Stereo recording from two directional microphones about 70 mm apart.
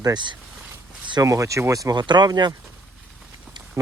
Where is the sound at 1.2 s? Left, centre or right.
Right.